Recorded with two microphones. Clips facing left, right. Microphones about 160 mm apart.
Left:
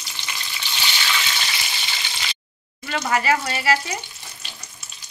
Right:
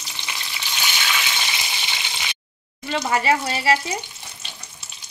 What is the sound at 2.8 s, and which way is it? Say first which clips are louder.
Speech: right 1 dB; 25° right (ahead or behind).